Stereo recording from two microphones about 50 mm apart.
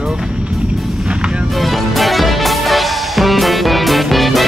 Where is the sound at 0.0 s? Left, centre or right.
Centre.